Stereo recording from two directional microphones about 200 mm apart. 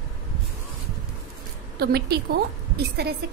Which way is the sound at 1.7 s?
50° right (ahead or behind).